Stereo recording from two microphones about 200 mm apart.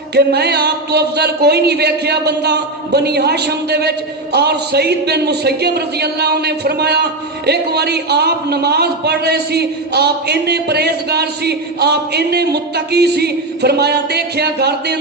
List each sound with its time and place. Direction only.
0.1 s speech: 55° right (ahead or behind)